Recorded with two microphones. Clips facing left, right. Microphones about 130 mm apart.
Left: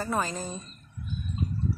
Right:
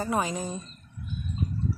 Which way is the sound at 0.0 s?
10° right (ahead or behind).